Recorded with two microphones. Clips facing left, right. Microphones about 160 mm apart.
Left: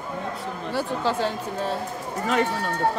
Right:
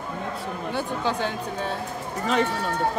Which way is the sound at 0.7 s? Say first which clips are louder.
Left 3 dB; 5° left (ahead or behind).